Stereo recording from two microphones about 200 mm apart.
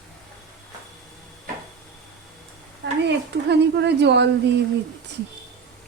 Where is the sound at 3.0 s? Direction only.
60° right (ahead or behind).